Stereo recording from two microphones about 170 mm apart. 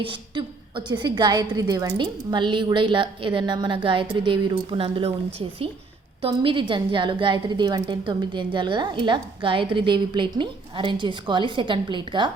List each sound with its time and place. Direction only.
0.0 s a woman's voice: 30° right (ahead or behind)
6.2 s a woman's voice: 30° right (ahead or behind)